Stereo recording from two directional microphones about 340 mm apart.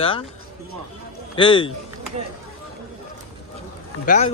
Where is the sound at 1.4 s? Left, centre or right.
Centre.